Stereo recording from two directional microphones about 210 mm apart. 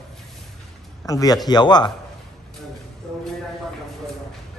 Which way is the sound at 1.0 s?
15° left (ahead or behind).